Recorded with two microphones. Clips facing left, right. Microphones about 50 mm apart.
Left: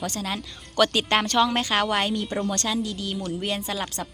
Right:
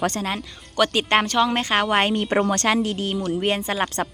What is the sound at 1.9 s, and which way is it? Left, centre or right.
A woman's voice, right.